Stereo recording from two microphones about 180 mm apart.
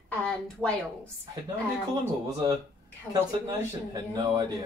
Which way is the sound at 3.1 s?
20° right (ahead or behind).